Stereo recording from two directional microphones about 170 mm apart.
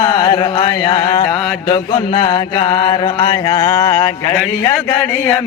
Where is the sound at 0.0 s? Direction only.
30° left (ahead or behind).